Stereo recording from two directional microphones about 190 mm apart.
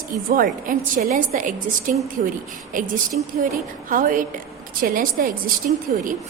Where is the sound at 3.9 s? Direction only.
45° right (ahead or behind).